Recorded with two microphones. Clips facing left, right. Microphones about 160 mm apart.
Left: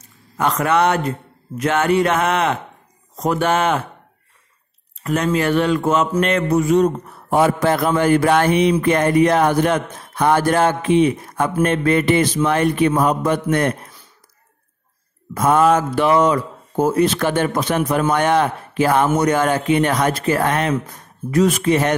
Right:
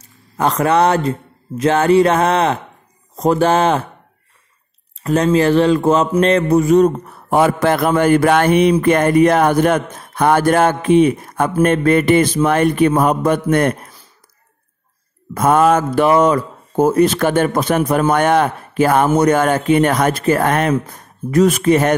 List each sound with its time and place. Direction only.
0.4 s speech: 35° right (ahead or behind)
5.0 s speech: 30° right (ahead or behind)
7.2 s speech: 65° right (ahead or behind)
15.3 s speech: 50° right (ahead or behind)